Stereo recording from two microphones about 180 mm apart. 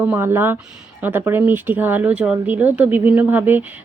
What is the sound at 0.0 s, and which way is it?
Speech, 10° right (ahead or behind).